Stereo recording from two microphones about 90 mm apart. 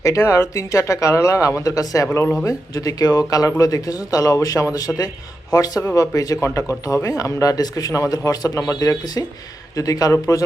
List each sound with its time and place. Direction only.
0.0 s speech: 35° left (ahead or behind)